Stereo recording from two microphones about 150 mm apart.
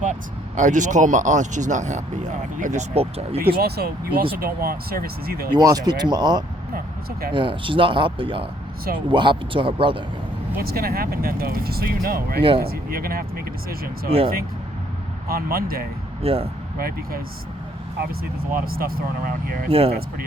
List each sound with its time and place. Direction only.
0.0 s speech: 55° right (ahead or behind)
3.4 s speech: 90° right
5.5 s speech: 25° right (ahead or behind)
10.6 s speech: 85° right
15.3 s speech: 80° right
16.2 s speech: 40° right (ahead or behind)
16.7 s speech: 80° right
18.2 s speech: 85° right